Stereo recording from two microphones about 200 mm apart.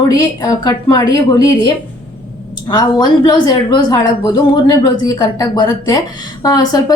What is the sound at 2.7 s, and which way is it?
A woman's voice, 20° left (ahead or behind).